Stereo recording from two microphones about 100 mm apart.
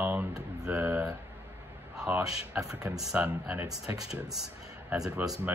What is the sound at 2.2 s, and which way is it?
A man's voice, 5° right (ahead or behind).